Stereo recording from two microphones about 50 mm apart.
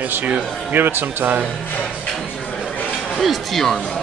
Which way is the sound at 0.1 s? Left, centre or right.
Right.